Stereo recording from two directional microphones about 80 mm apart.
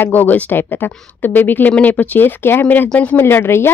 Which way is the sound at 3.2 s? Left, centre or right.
Left.